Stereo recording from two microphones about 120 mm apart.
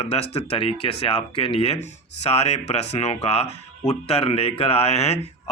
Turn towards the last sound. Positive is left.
turn(degrees=60)  # may be behind; listen again after turning